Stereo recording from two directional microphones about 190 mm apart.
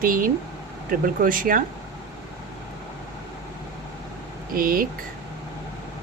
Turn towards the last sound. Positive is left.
turn(degrees=-50)  # may be behind; listen again after turning